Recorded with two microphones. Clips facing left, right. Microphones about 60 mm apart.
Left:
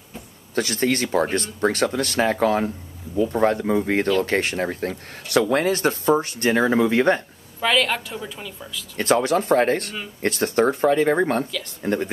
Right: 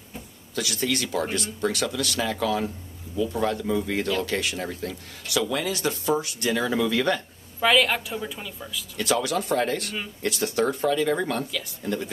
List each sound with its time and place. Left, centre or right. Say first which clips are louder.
0.6 s speech: left 5 dB; left
7.6 s a woman's voice: even; centre
8.9 s speech: left 6 dB; left